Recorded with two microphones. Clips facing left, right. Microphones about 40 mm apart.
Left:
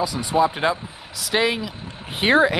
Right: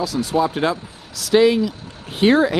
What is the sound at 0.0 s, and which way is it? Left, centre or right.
Speech, centre.